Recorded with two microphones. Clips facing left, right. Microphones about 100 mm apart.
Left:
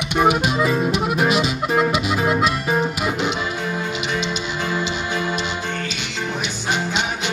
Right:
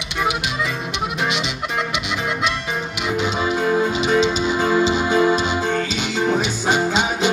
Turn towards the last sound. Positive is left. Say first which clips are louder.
# right 7 dB
turn(degrees=-40)  # may be behind; listen again after turning